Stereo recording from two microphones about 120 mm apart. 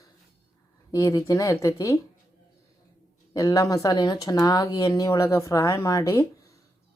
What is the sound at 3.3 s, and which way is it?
Speech, 30° left (ahead or behind).